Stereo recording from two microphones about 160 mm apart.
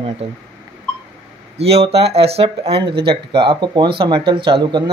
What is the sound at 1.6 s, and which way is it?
Speech, 40° right (ahead or behind).